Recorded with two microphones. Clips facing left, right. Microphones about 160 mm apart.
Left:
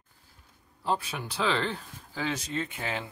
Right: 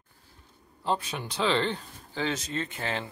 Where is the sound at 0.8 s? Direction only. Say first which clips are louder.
Right 1 dB; 5° left (ahead or behind).